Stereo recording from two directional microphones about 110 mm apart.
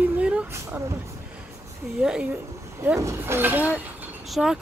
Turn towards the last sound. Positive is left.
turn(degrees=-5)  # may be behind; listen again after turning